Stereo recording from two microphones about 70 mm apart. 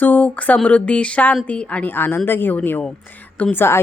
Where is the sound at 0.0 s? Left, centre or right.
Left.